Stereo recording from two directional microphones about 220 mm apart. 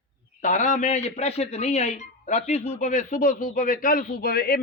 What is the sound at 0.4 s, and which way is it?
A man's voice, 35° left (ahead or behind).